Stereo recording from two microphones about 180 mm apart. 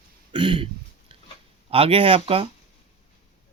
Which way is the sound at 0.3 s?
30° right (ahead or behind).